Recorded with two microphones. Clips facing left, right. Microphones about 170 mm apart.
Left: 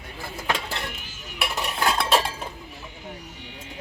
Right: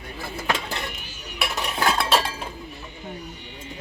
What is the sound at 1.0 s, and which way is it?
Dishes, 90° left.